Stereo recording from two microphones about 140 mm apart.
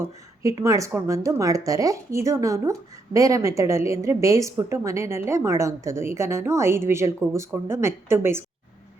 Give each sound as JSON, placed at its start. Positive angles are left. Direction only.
{"t": 0.0, "sound": "a woman's voice", "side_deg": -25}